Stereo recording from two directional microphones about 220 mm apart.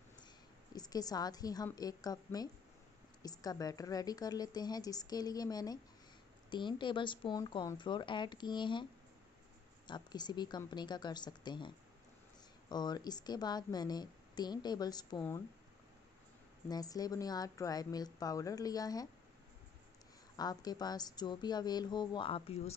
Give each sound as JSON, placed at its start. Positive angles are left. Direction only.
{"t": 0.7, "sound": "a woman's voice", "side_deg": 15}
{"t": 9.8, "sound": "a woman's voice", "side_deg": 20}
{"t": 16.6, "sound": "a woman's voice", "side_deg": 15}
{"t": 20.3, "sound": "a woman's voice", "side_deg": 15}